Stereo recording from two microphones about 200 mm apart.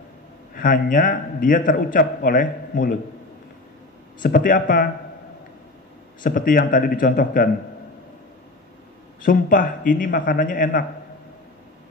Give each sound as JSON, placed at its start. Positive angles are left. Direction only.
{"t": 0.6, "sound": "a man's voice", "side_deg": 45}
{"t": 4.2, "sound": "a man's voice", "side_deg": 45}
{"t": 6.2, "sound": "a man's voice", "side_deg": 45}
{"t": 9.2, "sound": "a man's voice", "side_deg": 45}